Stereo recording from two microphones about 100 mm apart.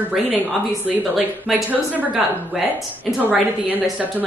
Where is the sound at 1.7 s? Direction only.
15° right (ahead or behind).